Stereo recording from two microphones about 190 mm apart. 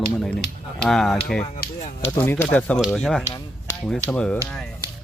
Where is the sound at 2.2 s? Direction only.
10° left (ahead or behind).